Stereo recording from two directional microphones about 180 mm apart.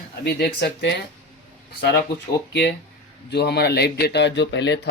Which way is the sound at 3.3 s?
65° left (ahead or behind).